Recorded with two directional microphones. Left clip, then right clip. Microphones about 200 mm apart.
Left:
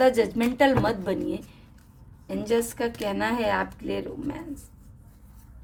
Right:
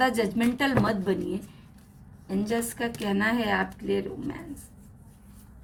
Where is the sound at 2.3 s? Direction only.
20° left (ahead or behind).